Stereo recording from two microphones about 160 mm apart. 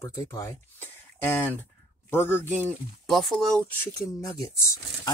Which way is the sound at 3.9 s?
20° left (ahead or behind).